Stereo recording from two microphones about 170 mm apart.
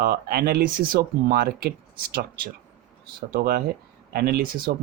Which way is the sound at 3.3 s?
65° right (ahead or behind).